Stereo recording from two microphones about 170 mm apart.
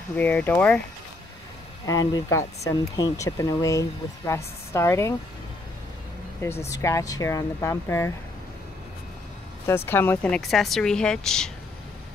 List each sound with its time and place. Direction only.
0.1 s speech: 10° left (ahead or behind)
1.9 s speech: 20° left (ahead or behind)
6.7 s speech: 20° left (ahead or behind)
9.7 s speech: 15° left (ahead or behind)